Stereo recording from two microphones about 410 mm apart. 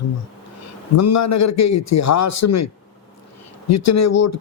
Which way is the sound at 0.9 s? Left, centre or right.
Left.